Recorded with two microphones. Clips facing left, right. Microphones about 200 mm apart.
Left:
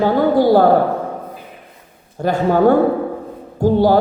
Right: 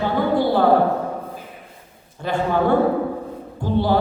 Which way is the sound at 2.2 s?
40° left (ahead or behind).